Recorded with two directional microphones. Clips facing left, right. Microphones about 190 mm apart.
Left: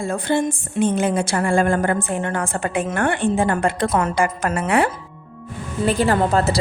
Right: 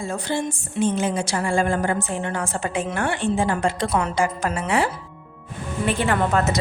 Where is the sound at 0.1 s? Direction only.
55° left (ahead or behind).